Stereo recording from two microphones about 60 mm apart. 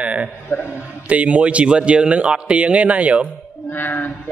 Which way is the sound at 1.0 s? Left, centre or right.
Right.